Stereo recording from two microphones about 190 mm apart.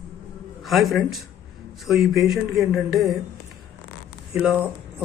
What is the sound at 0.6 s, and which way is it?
Speech, centre (ahead or behind).